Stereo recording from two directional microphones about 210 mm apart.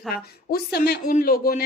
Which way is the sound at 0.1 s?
50° left (ahead or behind).